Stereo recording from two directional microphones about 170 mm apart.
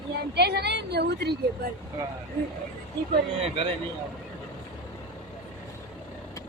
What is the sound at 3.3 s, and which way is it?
Speech, 35° right (ahead or behind).